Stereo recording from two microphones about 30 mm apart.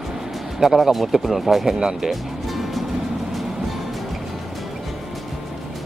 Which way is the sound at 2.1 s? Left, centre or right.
Centre.